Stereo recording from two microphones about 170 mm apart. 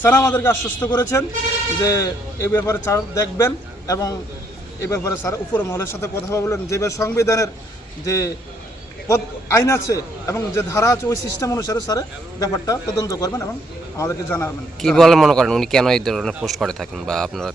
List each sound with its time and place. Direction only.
0.0 s a man's voice: 15° left (ahead or behind)
0.9 s a man's voice: 25° left (ahead or behind)
14.8 s speech: centre (ahead or behind)